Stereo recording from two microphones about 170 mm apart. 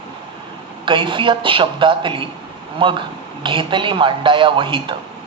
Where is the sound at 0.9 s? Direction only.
30° right (ahead or behind).